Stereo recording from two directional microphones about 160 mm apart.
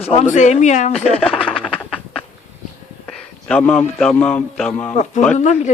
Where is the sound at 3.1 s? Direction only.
5° left (ahead or behind).